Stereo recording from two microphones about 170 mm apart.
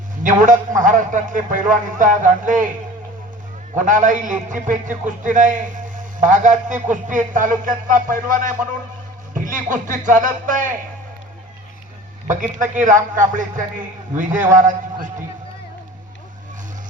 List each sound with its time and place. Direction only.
0.2 s a man's voice: 50° right (ahead or behind)
3.8 s a man's voice: 50° right (ahead or behind)
12.7 s a man's voice: 50° right (ahead or behind)